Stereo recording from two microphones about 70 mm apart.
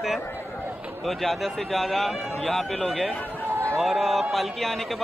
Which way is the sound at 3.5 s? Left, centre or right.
Right.